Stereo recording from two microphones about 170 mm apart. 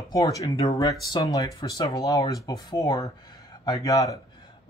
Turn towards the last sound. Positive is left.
turn(degrees=20)  # may be behind; listen again after turning